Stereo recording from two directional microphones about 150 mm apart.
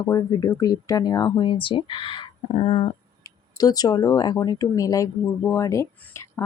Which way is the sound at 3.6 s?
25° left (ahead or behind).